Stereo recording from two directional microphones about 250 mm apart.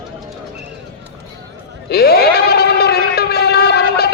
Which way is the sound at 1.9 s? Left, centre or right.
Left.